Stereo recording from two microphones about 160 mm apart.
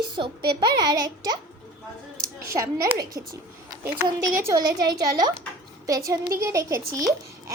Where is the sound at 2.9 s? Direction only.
25° right (ahead or behind).